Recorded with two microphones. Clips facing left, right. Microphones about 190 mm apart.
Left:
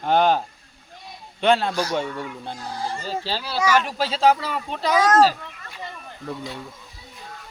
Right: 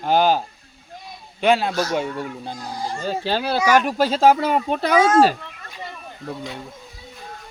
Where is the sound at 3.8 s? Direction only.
45° right (ahead or behind).